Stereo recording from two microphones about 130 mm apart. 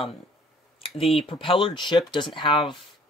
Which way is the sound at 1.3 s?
40° left (ahead or behind).